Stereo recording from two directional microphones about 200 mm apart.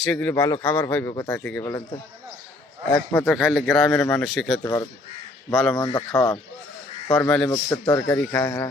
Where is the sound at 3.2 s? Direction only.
5° right (ahead or behind).